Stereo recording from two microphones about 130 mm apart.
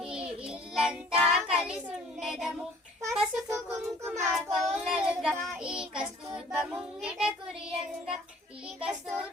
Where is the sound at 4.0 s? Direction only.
20° right (ahead or behind).